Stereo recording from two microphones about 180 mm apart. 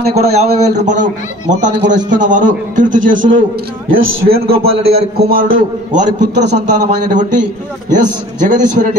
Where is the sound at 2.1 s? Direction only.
45° right (ahead or behind).